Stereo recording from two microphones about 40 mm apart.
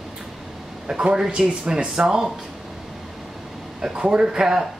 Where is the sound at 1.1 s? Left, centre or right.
Centre.